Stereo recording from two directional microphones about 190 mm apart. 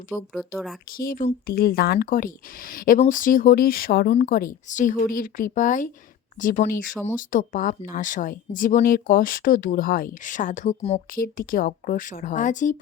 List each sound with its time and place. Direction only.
0.3 s speech: centre (ahead or behind)
0.9 s speech: 50° left (ahead or behind)
11.2 s speech: 50° left (ahead or behind)